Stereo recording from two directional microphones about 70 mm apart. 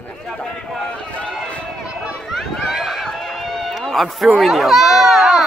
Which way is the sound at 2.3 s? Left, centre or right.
Centre.